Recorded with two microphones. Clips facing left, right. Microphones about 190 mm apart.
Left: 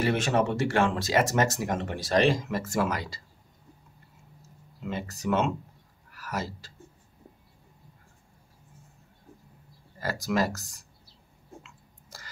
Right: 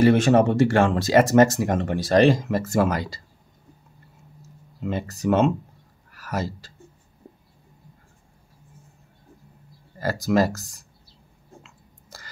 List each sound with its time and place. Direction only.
0.0 s speech: 45° right (ahead or behind)
4.8 s speech: 40° right (ahead or behind)
9.9 s speech: 35° right (ahead or behind)